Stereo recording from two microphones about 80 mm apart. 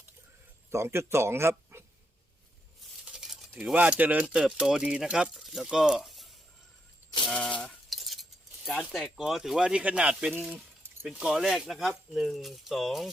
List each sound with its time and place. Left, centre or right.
0.7 s speech: right
3.1 s speech: centre
7.3 s a sound: centre
7.6 s cutlery: centre
8.8 s speech: centre